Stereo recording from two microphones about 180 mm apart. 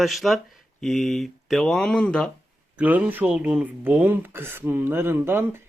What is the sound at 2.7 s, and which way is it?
Speech, 10° right (ahead or behind).